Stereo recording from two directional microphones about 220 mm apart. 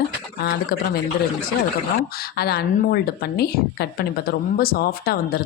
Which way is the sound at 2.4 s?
45° left (ahead or behind).